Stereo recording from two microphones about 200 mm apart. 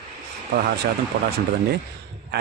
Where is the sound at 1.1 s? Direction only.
50° right (ahead or behind).